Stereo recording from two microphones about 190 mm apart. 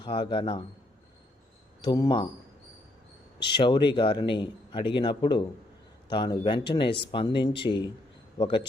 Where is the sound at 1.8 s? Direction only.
20° left (ahead or behind).